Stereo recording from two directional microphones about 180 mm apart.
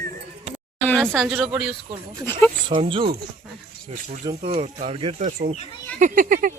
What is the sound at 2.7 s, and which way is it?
Speech, 30° right (ahead or behind).